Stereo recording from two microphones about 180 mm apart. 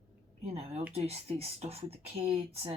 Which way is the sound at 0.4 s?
35° right (ahead or behind).